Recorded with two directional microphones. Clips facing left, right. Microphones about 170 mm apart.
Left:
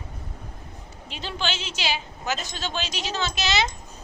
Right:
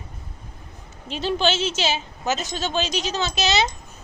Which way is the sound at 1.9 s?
20° right (ahead or behind).